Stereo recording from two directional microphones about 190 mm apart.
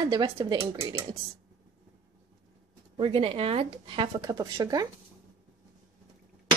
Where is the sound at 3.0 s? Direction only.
30° right (ahead or behind).